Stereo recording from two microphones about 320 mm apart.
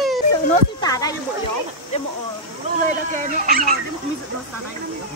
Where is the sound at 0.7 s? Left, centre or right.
Centre.